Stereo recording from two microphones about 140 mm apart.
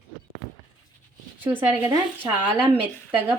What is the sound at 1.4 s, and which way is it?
Speech, 15° right (ahead or behind).